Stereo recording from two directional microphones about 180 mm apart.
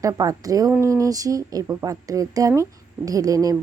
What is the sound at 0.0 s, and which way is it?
A woman's voice, 20° right (ahead or behind).